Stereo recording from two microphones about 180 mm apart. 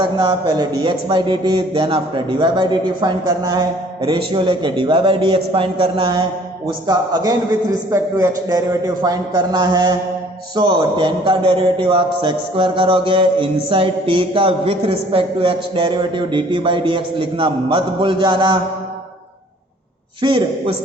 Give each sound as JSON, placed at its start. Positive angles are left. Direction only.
{"t": 0.0, "sound": "a man's voice", "side_deg": -25}
{"t": 20.2, "sound": "a man's voice", "side_deg": -30}